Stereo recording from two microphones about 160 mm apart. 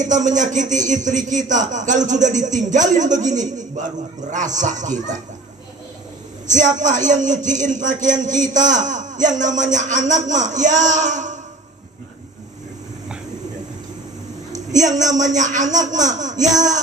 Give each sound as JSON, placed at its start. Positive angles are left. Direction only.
{"t": 0.0, "sound": "a man's voice", "side_deg": -50}
{"t": 6.5, "sound": "a man's voice", "side_deg": -50}
{"t": 14.7, "sound": "a man's voice", "side_deg": -50}